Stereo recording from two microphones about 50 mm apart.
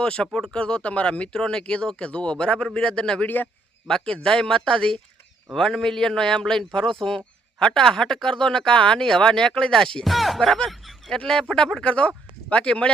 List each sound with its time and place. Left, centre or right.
0.0 s speech: centre
3.2 s a man's voice: left
3.8 s speech: centre
10.1 s music: centre
10.7 s snicker: centre
11.2 s speech: centre
11.9 s speech: left